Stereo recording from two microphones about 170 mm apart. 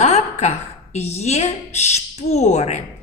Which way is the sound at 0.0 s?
40° left (ahead or behind).